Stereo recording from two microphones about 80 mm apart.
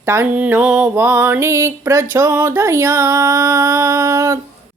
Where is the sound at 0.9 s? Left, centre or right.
Right.